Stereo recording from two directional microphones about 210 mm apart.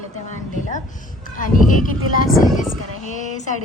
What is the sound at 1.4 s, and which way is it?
Speech, 40° left (ahead or behind).